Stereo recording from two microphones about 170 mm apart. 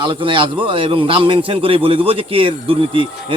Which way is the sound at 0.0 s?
30° right (ahead or behind).